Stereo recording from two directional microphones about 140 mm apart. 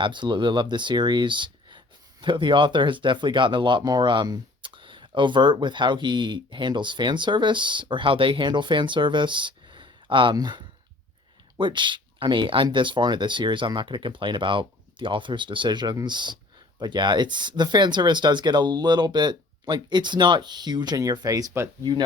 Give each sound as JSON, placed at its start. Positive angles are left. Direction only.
{"t": 0.0, "sound": "speech", "side_deg": -35}